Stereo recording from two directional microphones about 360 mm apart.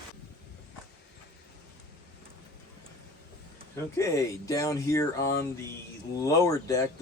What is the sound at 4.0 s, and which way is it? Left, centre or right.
Speech, centre.